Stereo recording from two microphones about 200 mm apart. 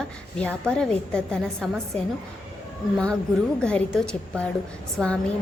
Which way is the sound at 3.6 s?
5° left (ahead or behind).